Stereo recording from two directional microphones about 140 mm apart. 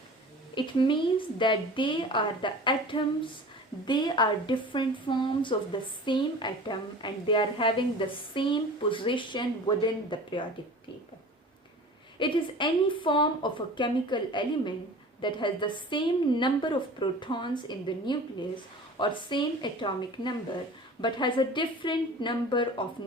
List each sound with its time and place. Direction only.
0.5 s a woman's voice: 35° left (ahead or behind)
12.2 s a woman's voice: 35° left (ahead or behind)